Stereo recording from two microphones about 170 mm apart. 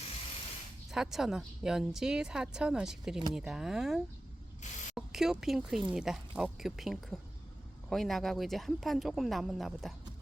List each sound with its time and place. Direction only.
0.9 s a woman's voice: centre (ahead or behind)
4.6 s spray: 45° left (ahead or behind)
4.9 s a woman's voice: 5° right (ahead or behind)